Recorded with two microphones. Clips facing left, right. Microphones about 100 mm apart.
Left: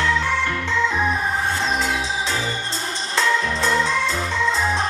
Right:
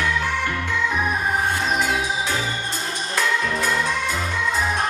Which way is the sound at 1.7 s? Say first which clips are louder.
Right 1 dB; 25° left (ahead or behind).